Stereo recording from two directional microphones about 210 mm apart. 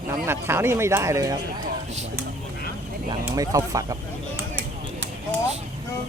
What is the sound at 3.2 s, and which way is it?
Speech, 15° right (ahead or behind).